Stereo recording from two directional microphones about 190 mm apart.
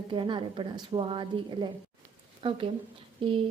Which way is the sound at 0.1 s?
25° right (ahead or behind).